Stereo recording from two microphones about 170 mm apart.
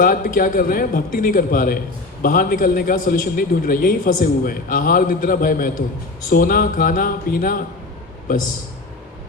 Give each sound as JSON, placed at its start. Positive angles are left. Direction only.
{"t": 0.0, "sound": "a man's voice", "side_deg": 55}